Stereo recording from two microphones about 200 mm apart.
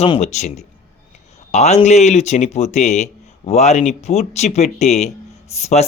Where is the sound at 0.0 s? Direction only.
35° left (ahead or behind).